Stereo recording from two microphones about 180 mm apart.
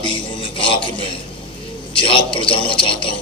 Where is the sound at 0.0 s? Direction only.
30° left (ahead or behind).